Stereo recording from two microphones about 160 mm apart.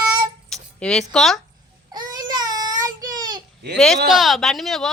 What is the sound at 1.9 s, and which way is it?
Baby cry, 25° right (ahead or behind).